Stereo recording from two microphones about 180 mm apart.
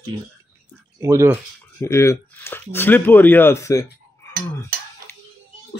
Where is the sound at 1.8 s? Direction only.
15° left (ahead or behind).